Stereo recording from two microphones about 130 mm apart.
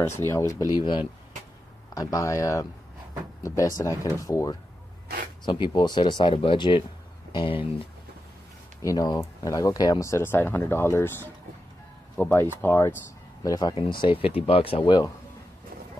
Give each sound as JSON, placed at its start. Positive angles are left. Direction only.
{"t": 0.3, "sound": "speech", "side_deg": 25}
{"t": 5.4, "sound": "speech", "side_deg": 40}
{"t": 8.8, "sound": "speech", "side_deg": 30}
{"t": 13.4, "sound": "speech", "side_deg": 30}
{"t": 13.7, "sound": "speech", "side_deg": 40}